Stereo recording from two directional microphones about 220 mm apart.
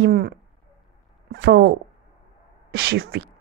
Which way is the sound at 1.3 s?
50° right (ahead or behind).